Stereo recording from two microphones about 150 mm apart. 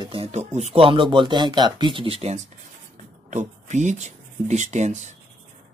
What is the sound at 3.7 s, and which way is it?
Speech, 55° right (ahead or behind).